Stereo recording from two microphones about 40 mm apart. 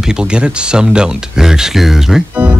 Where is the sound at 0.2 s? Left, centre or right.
Right.